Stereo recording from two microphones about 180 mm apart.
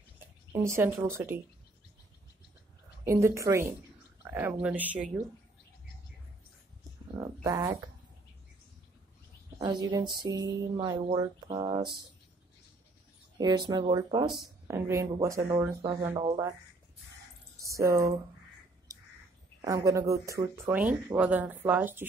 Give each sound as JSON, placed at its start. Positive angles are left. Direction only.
{"t": 0.5, "sound": "speech", "side_deg": -15}
{"t": 3.1, "sound": "speech", "side_deg": -15}
{"t": 7.2, "sound": "speech", "side_deg": -20}
{"t": 9.6, "sound": "speech", "side_deg": -20}
{"t": 13.4, "sound": "speech", "side_deg": -20}
{"t": 17.6, "sound": "speech", "side_deg": -15}
{"t": 19.6, "sound": "speech", "side_deg": -20}